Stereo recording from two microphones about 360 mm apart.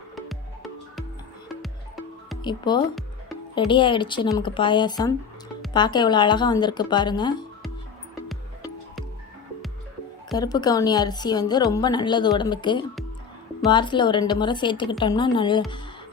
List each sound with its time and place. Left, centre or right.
0.3 s music: centre
2.4 s a woman's voice: centre
8.3 s music: centre
10.3 s a woman's voice: centre